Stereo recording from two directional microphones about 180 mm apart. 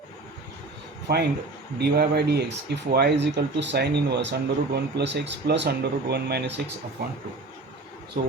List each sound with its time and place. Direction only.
1.1 s speech: 60° right (ahead or behind)
8.1 s speech: 50° right (ahead or behind)